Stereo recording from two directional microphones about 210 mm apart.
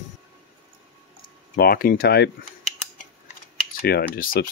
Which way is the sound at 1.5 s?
45° left (ahead or behind).